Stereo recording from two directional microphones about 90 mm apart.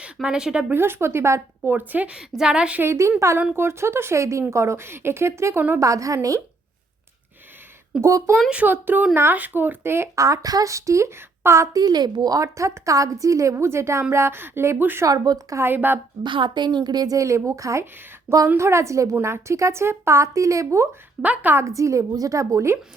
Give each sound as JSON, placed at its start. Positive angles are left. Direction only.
{"t": 0.0, "sound": "a woman's voice", "side_deg": -10}
{"t": 0.7, "sound": "a woman's voice", "side_deg": -25}
{"t": 2.8, "sound": "a woman's voice", "side_deg": -30}
{"t": 7.9, "sound": "a woman's voice", "side_deg": -10}
{"t": 10.2, "sound": "a woman's voice", "side_deg": -35}
{"t": 11.8, "sound": "a woman's voice", "side_deg": -50}
{"t": 15.0, "sound": "a woman's voice", "side_deg": -45}
{"t": 15.6, "sound": "speech", "side_deg": -20}
{"t": 16.2, "sound": "a woman's voice", "side_deg": -60}
{"t": 21.2, "sound": "a woman's voice", "side_deg": -15}
{"t": 21.6, "sound": "a woman's voice", "side_deg": -35}